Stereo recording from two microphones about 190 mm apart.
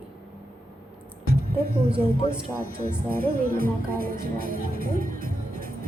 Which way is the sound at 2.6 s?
50° right (ahead or behind).